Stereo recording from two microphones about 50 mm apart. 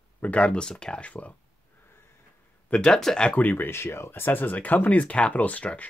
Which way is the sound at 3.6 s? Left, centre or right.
Left.